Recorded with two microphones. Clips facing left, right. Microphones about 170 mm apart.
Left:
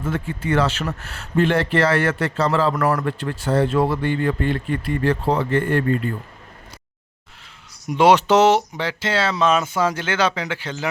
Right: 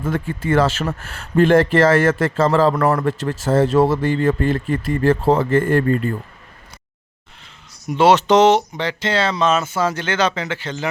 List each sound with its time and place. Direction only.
0.0 s speech: 50° right (ahead or behind)
2.8 s a man's voice: 25° right (ahead or behind)
3.1 s speech: 40° right (ahead or behind)
7.9 s speech: 10° left (ahead or behind)